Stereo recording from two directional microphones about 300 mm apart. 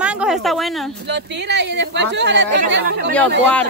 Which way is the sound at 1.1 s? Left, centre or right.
Right.